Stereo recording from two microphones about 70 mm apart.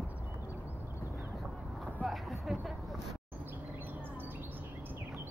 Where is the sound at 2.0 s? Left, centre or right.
Centre.